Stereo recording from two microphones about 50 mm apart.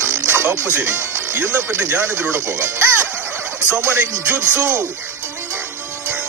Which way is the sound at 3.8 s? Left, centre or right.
Right.